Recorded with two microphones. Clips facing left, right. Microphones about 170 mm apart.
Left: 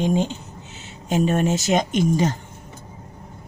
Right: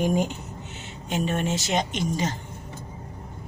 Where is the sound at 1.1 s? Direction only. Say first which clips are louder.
Left 6 dB; 40° left (ahead or behind).